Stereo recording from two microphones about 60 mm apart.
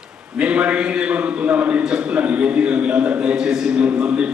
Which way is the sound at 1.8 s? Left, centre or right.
Centre.